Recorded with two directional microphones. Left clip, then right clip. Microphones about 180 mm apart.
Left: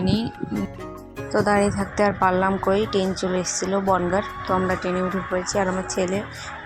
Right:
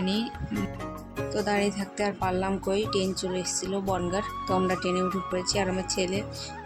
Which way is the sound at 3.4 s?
Centre (ahead or behind).